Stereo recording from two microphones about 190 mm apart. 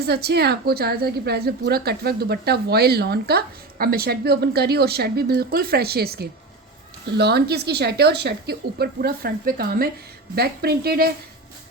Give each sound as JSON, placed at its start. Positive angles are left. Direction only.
{"t": 0.0, "sound": "a woman's voice", "side_deg": -55}